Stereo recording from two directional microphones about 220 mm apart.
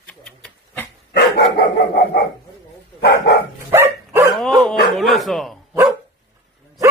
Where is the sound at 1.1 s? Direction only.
45° left (ahead or behind).